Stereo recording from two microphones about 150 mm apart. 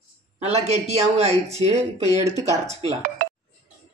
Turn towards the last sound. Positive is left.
turn(degrees=-65)  # may be behind; listen again after turning